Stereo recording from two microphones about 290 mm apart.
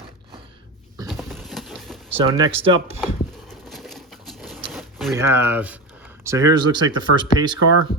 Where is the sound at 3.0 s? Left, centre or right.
Centre.